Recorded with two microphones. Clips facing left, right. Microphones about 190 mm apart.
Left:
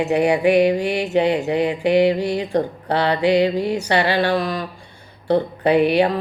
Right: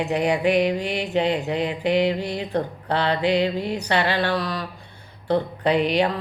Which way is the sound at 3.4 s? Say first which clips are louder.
Left 5 dB; 65° left (ahead or behind).